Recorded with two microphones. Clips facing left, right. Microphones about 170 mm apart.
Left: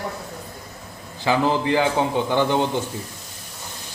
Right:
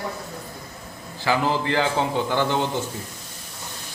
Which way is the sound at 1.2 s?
20° left (ahead or behind).